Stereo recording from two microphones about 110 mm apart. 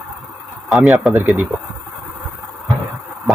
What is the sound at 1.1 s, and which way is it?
Speech, 15° right (ahead or behind).